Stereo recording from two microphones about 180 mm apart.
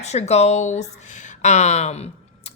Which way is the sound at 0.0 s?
40° left (ahead or behind).